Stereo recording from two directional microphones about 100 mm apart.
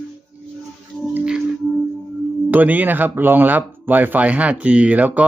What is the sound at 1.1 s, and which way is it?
Music, 10° right (ahead or behind).